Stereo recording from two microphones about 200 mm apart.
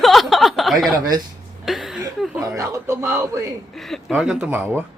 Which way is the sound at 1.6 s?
Centre (ahead or behind).